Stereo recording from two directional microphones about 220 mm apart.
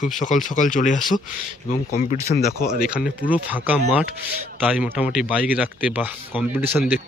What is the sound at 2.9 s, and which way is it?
Speech, 5° right (ahead or behind).